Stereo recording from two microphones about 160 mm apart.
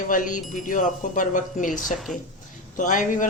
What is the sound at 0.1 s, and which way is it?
Speech, 55° left (ahead or behind).